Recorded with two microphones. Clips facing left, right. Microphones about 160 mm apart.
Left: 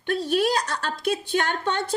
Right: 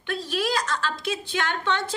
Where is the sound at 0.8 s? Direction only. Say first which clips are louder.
Left 3 dB; 50° left (ahead or behind).